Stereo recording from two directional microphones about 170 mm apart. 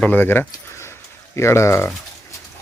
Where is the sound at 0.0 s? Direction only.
10° left (ahead or behind).